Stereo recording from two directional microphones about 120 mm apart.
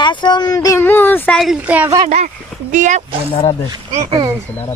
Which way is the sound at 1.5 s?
10° right (ahead or behind).